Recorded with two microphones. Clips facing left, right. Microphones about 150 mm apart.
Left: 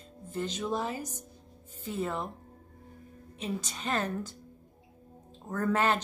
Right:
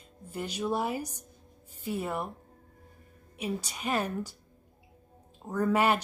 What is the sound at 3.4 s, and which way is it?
Speech, 10° right (ahead or behind).